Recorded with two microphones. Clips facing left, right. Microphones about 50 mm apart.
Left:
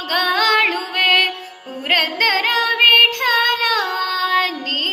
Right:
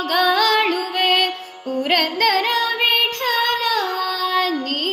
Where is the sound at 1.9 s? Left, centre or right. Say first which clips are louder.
Left 2 dB; left.